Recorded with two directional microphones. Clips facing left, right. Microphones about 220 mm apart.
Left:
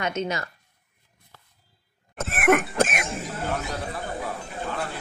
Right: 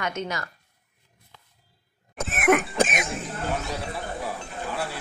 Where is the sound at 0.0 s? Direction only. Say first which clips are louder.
Left 3 dB; 25° left (ahead or behind).